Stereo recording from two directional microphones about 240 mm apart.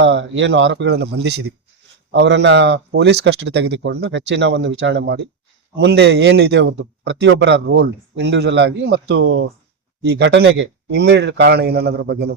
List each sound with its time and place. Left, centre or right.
0.0 s a man's voice: right